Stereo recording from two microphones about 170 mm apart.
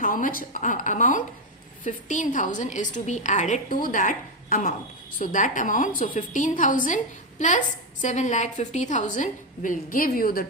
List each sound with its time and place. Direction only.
0.0 s a woman's voice: 55° left (ahead or behind)